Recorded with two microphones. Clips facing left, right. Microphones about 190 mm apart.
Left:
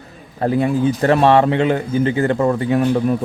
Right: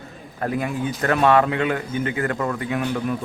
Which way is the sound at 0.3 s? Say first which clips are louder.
Left 8 dB; 30° left (ahead or behind).